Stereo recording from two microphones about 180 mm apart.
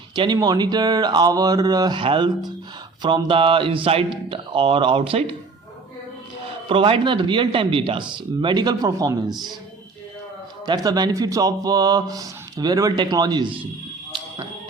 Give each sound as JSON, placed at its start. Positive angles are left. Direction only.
{"t": 0.2, "sound": "speech", "side_deg": -25}
{"t": 6.7, "sound": "speech", "side_deg": -30}
{"t": 10.7, "sound": "speech", "side_deg": -25}